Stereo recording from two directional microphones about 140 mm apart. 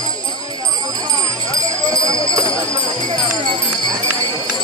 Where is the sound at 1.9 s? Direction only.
25° right (ahead or behind).